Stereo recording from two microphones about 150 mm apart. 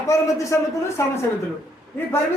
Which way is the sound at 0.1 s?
20° left (ahead or behind).